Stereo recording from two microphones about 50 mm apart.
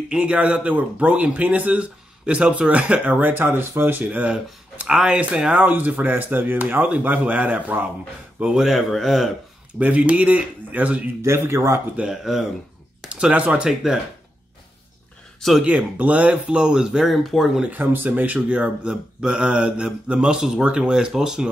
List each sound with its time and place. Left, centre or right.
0.1 s speech: right
1.8 s speech: right
4.8 s speech: centre
5.6 s speech: right
8.5 s speech: centre
9.8 s speech: right
11.2 s speech: right
12.1 s speech: centre
13.1 s speech: right
15.6 s speech: right
17.0 s speech: centre
17.6 s speech: right; by 21.5 s centre